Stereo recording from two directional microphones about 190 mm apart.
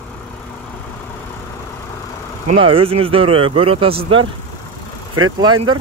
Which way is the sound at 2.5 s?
30° right (ahead or behind).